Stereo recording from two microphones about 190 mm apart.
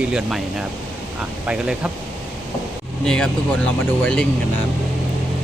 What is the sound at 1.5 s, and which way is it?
Speech, 5° right (ahead or behind).